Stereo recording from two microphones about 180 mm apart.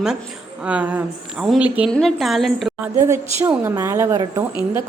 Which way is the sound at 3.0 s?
15° right (ahead or behind).